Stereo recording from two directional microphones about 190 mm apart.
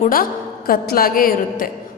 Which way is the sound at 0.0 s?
45° left (ahead or behind).